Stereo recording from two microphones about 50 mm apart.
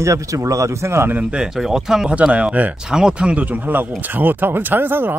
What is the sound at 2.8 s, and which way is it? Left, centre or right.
Speech, centre.